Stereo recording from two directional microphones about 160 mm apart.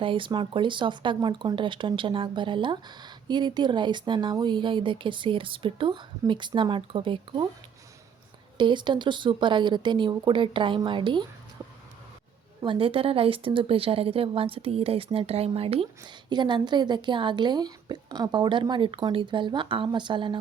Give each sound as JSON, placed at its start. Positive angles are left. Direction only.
{"t": 0.0, "sound": "a woman's voice", "side_deg": -30}
{"t": 8.5, "sound": "speech", "side_deg": -30}
{"t": 12.6, "sound": "a woman's voice", "side_deg": -35}